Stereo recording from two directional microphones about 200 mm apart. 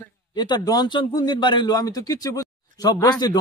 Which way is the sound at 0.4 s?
20° left (ahead or behind).